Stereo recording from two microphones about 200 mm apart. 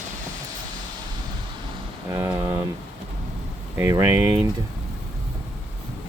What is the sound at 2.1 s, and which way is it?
Speech, 15° right (ahead or behind).